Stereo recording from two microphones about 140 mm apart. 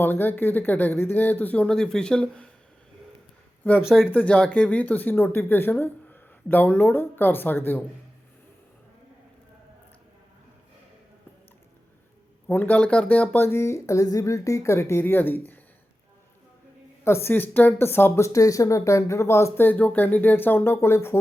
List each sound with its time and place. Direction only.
0.0 s speech: 15° left (ahead or behind)
3.8 s speech: 5° right (ahead or behind)
4.1 s speech: 10° left (ahead or behind)
12.5 s speech: 10° left (ahead or behind)
17.0 s speech: 20° left (ahead or behind)